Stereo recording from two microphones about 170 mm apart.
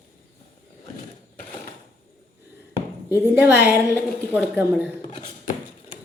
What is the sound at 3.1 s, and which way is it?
Speech, 10° right (ahead or behind).